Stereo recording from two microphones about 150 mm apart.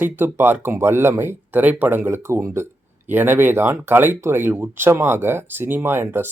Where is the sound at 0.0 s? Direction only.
15° right (ahead or behind).